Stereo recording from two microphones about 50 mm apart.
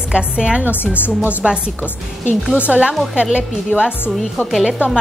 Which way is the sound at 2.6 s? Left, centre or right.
Right.